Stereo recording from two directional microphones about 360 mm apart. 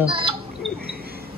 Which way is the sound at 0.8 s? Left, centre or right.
Right.